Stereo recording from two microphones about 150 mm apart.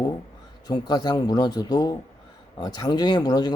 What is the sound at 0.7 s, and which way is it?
Speech, 25° left (ahead or behind).